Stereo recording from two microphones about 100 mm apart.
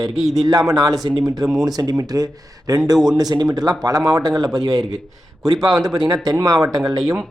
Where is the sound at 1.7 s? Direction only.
35° right (ahead or behind).